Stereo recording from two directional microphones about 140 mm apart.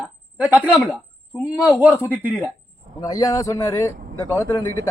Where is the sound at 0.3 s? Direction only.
10° right (ahead or behind).